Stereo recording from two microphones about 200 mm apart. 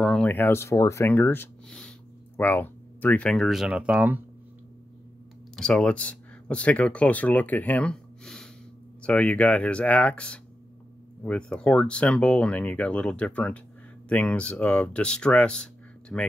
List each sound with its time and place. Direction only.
0.0 s speech: 5° left (ahead or behind)
5.6 s speech: 5° left (ahead or behind)